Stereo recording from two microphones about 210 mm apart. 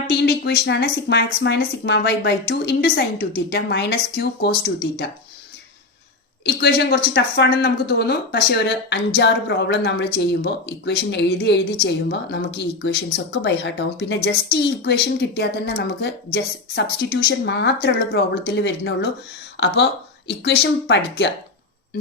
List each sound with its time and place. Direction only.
0.1 s a woman's voice: 50° left (ahead or behind)
6.4 s a woman's voice: 55° left (ahead or behind)